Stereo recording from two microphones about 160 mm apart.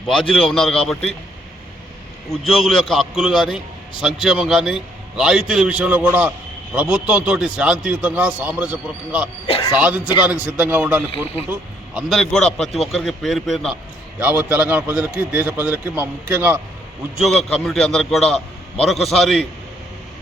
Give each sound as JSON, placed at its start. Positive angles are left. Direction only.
{"t": 0.3, "sound": "a man's voice", "side_deg": 0}
{"t": 2.3, "sound": "a man's voice", "side_deg": 0}
{"t": 9.5, "sound": "a man's voice", "side_deg": 35}
{"t": 9.7, "sound": "a man's voice", "side_deg": -10}
{"t": 14.2, "sound": "a man's voice", "side_deg": -10}
{"t": 17.2, "sound": "a man's voice", "side_deg": 0}